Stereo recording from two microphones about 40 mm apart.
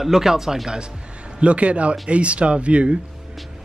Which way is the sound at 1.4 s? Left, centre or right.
Right.